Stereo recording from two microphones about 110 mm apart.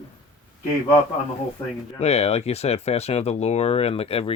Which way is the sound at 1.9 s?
75° left (ahead or behind).